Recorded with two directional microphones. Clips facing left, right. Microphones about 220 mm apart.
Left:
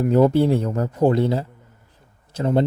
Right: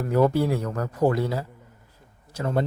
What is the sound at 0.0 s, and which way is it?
Speech, 20° left (ahead or behind).